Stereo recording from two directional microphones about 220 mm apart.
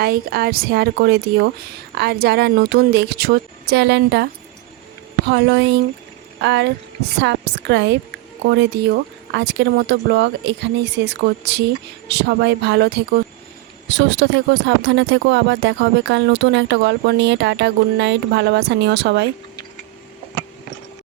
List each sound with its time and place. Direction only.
0.0 s speech: 45° right (ahead or behind)